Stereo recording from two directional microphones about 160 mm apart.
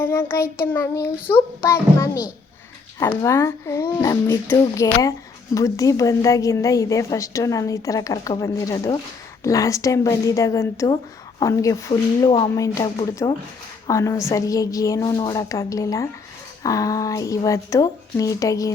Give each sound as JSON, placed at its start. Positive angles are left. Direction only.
{"t": 0.0, "sound": "a child's voice", "side_deg": 15}
{"t": 3.2, "sound": "a woman's voice", "side_deg": 20}